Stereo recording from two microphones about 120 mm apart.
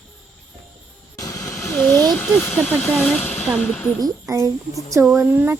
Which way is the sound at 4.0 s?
25° right (ahead or behind).